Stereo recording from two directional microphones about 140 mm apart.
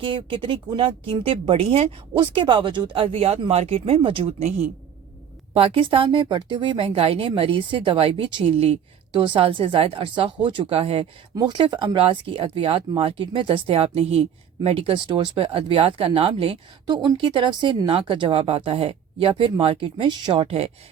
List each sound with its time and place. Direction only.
0.0 s speech: 35° right (ahead or behind)
5.5 s speech: 40° right (ahead or behind)
16.8 s speech: 30° right (ahead or behind)